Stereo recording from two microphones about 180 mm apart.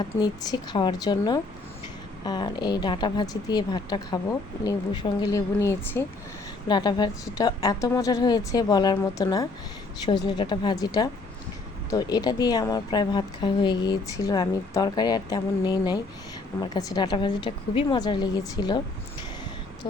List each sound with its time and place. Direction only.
0.0 s a woman's voice: 20° left (ahead or behind)
6.7 s a woman's voice: 25° left (ahead or behind)